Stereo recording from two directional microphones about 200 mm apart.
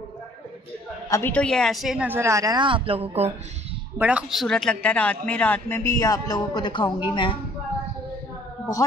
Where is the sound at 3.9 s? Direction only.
5° right (ahead or behind); by 6.9 s 20° left (ahead or behind).